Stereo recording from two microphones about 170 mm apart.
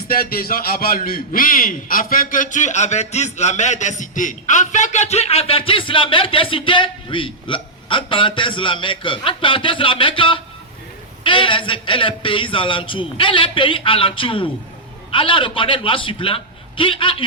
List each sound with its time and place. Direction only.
0.1 s a man's voice: 60° left (ahead or behind); by 17.2 s 30° left (ahead or behind)